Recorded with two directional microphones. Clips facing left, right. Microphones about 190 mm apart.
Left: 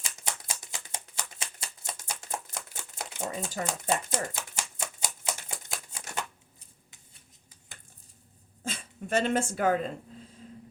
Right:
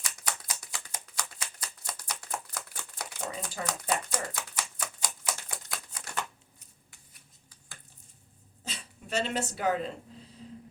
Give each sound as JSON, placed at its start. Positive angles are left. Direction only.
{"t": 0.0, "sound": "shuffling cards", "side_deg": 25}
{"t": 3.6, "sound": "typewriter", "side_deg": 25}
{"t": 6.9, "sound": "a sound", "side_deg": 20}
{"t": 8.6, "sound": "speech", "side_deg": 50}